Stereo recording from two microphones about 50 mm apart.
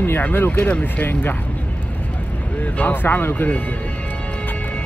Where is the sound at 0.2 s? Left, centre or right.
Left.